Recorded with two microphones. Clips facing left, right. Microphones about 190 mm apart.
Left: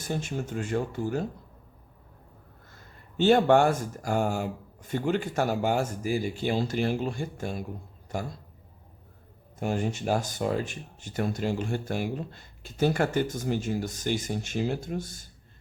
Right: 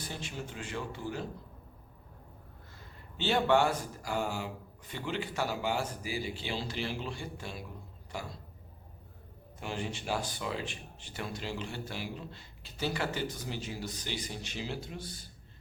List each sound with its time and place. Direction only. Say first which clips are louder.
0.0 s speech: left 9 dB; 45° left (ahead or behind)
3.2 s speech: left 7 dB; 50° left (ahead or behind)
9.6 s speech: left 9 dB; 45° left (ahead or behind)